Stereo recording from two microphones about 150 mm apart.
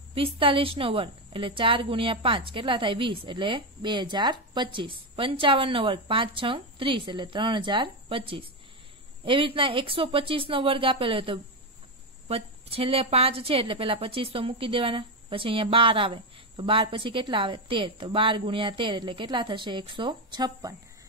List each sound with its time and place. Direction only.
0.1 s a woman's voice: 35° right (ahead or behind)